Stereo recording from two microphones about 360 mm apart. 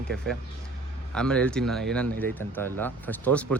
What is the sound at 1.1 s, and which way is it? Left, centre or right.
Speech, centre.